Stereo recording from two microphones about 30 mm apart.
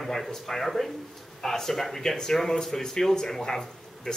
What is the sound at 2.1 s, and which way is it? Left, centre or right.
Speech, left.